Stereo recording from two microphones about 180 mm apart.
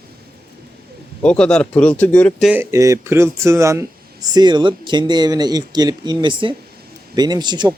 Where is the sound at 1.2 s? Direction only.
5° left (ahead or behind).